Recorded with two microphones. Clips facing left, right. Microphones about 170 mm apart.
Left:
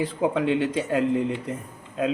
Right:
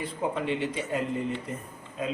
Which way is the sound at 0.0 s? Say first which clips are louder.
Left 7 dB; 90° left.